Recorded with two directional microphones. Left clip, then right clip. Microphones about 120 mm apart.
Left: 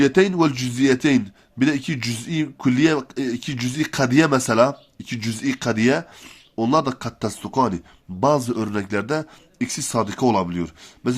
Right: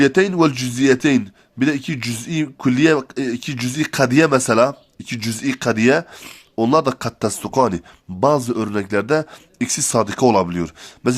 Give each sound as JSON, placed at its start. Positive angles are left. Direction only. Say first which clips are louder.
{"t": 0.0, "sound": "a man's voice", "louder": "right 2 dB", "side_deg": -30}
{"t": 6.2, "sound": "speech", "louder": "right 4 dB", "side_deg": -40}
{"t": 8.4, "sound": "speech", "louder": "right 3 dB", "side_deg": -25}